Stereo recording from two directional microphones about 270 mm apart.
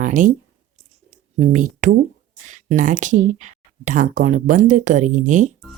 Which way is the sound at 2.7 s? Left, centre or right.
Right.